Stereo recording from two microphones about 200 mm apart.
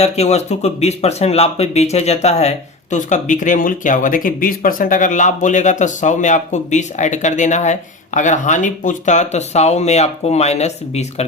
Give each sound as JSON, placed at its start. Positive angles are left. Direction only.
{"t": 0.0, "sound": "speech", "side_deg": 35}